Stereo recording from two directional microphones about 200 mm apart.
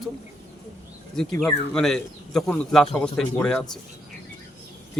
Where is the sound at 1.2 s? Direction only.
5° left (ahead or behind).